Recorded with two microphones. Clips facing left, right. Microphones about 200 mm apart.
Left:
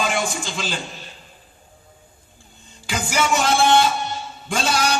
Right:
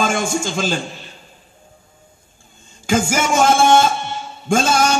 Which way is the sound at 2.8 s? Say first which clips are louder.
Right 5 dB; 45° right (ahead or behind).